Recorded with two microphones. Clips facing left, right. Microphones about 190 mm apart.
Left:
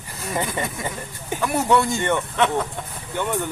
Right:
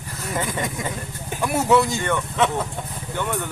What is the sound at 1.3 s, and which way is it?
Speech, 10° right (ahead or behind).